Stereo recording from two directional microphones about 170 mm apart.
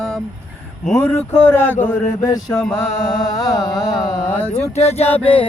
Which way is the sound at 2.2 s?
20° left (ahead or behind).